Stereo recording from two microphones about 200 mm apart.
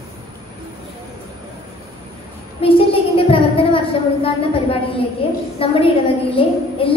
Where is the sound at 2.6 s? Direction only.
25° left (ahead or behind).